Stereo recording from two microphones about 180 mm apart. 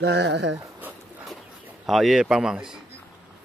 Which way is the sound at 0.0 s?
75° right (ahead or behind).